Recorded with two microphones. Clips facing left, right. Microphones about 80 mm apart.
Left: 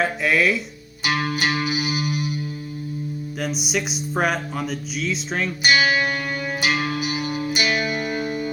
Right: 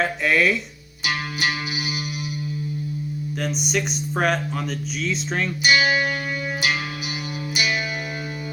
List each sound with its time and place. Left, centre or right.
0.0 s speech: centre
1.0 s music: left
3.3 s speech: centre
5.7 s music: left